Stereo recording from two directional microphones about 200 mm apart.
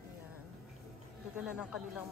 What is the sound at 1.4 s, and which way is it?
Speech, 5° right (ahead or behind).